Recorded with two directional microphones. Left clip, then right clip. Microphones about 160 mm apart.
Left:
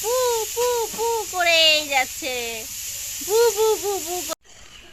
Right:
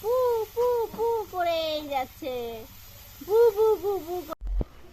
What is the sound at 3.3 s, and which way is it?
Owl, 40° left (ahead or behind).